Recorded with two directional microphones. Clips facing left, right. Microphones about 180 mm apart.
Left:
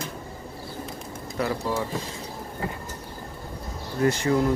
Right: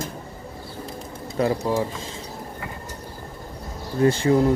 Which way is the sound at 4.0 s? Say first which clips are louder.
Right 4 dB; 30° right (ahead or behind).